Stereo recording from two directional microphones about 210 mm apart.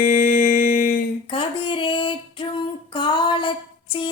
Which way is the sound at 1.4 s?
25° left (ahead or behind).